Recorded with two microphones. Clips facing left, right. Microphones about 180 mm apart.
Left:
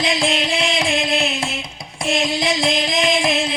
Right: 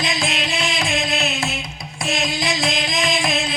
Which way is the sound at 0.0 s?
25° left (ahead or behind).